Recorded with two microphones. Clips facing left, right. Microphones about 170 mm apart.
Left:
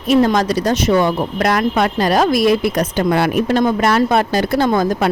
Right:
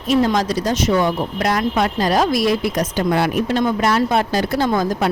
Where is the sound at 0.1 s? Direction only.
60° left (ahead or behind).